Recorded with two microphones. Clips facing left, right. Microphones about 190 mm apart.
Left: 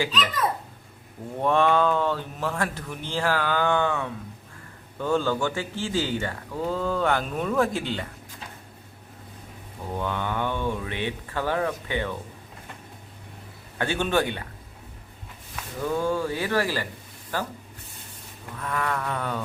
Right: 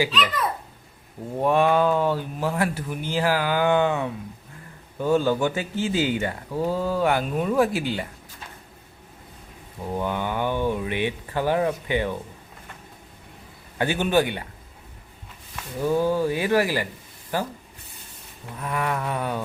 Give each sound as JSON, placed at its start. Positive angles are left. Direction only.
{"t": 1.4, "sound": "speech", "side_deg": -10}
{"t": 9.9, "sound": "speech", "side_deg": -10}
{"t": 13.7, "sound": "speech", "side_deg": -15}
{"t": 15.8, "sound": "speech", "side_deg": -15}
{"t": 18.6, "sound": "speech", "side_deg": -15}